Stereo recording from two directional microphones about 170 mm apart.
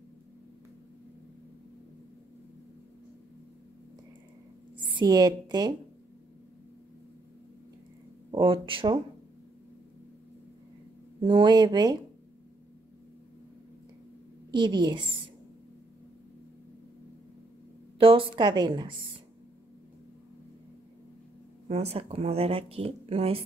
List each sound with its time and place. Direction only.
4.7 s a woman's voice: 25° right (ahead or behind)
8.3 s speech: 30° right (ahead or behind)
11.1 s a woman's voice: 25° right (ahead or behind)
14.5 s a woman's voice: 25° right (ahead or behind)
17.9 s a woman's voice: 30° right (ahead or behind)
21.6 s a woman's voice: 35° right (ahead or behind)